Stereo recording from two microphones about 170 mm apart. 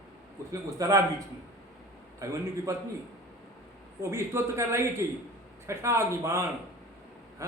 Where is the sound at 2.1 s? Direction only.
20° right (ahead or behind).